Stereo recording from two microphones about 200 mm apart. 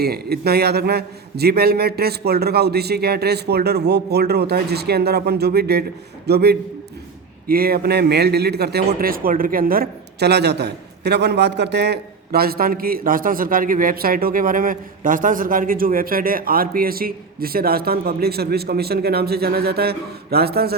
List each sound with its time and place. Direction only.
0.0 s a man's voice: 50° right (ahead or behind)